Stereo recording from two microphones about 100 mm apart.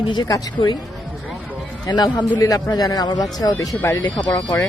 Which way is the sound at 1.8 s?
45° left (ahead or behind).